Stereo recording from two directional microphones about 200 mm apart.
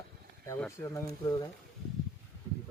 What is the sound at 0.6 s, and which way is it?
Speech, 15° left (ahead or behind).